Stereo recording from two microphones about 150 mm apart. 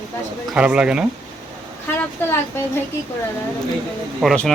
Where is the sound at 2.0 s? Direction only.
15° left (ahead or behind).